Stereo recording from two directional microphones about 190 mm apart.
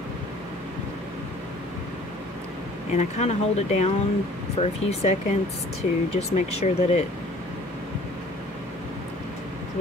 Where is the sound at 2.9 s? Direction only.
35° left (ahead or behind).